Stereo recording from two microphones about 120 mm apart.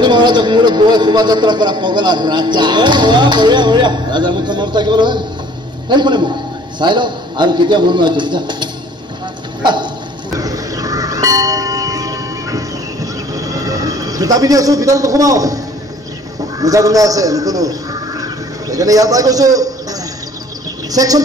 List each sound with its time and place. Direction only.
0.0 s a man's voice: 40° right (ahead or behind)
9.6 s dog: 40° right (ahead or behind)
10.3 s church bell: 30° right (ahead or behind)
16.6 s a man's voice: 30° right (ahead or behind)
20.9 s a man's voice: 30° right (ahead or behind)